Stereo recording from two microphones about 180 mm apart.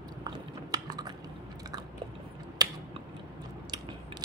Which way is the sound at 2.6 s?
20° right (ahead or behind).